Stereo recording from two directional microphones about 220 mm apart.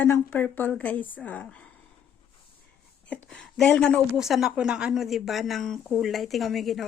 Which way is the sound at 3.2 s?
Centre (ahead or behind).